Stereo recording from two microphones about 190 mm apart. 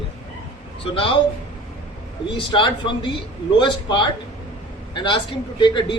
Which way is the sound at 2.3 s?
25° left (ahead or behind).